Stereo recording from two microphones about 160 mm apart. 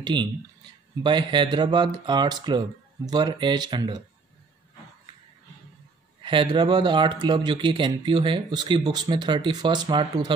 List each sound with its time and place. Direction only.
0.0 s speech: 30° right (ahead or behind)
6.2 s speech: 30° right (ahead or behind)